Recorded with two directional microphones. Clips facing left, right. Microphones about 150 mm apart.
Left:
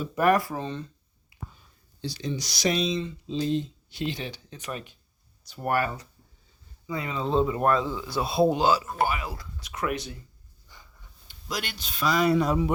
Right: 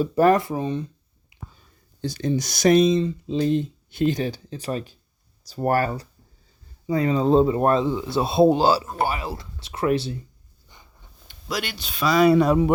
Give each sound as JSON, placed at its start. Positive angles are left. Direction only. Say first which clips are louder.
{"t": 0.0, "sound": "speech", "louder": "right 5 dB", "side_deg": -30}
{"t": 1.3, "sound": "a sound", "louder": "even", "side_deg": -20}
{"t": 2.0, "sound": "a man's voice", "louder": "right 8 dB", "side_deg": -50}
{"t": 10.7, "sound": "dog", "louder": "right 1 dB", "side_deg": -20}
{"t": 11.3, "sound": "a man's voice", "louder": "right 5 dB", "side_deg": -70}